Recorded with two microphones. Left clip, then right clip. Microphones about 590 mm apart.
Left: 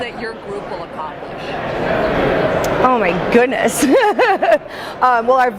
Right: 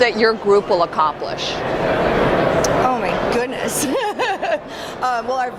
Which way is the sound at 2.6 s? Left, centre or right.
Left.